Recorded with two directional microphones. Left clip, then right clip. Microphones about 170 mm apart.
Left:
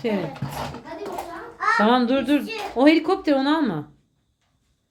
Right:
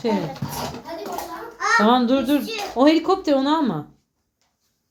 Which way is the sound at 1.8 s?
5° left (ahead or behind).